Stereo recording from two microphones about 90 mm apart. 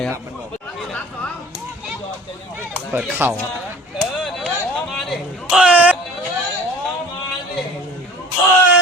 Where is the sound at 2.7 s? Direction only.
20° right (ahead or behind).